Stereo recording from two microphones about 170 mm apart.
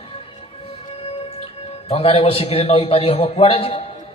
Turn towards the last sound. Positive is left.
turn(degrees=35)  # may be behind; listen again after turning